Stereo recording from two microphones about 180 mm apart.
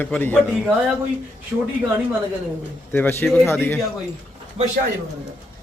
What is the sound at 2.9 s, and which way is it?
Speech, 10° left (ahead or behind).